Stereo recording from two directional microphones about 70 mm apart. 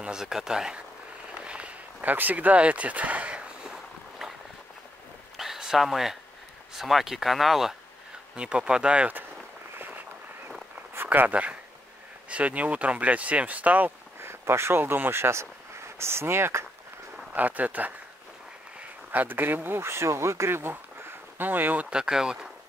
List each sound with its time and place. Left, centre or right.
0.0 s speech: centre
3.6 s boat: centre
5.4 s a sound: centre
6.7 s speech: centre
8.4 s speech: centre
9.8 s a sound: right
11.1 s speech: right
14.2 s speech: right
17.3 s speech: right
19.1 s speech: right
21.9 s speech: centre